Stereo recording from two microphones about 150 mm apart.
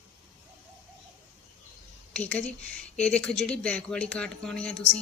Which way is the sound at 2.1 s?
10° left (ahead or behind).